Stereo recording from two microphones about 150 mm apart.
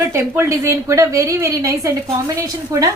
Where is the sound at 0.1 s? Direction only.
15° right (ahead or behind).